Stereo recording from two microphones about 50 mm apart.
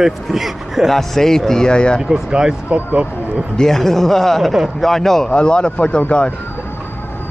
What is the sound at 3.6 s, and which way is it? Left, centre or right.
Speech, centre.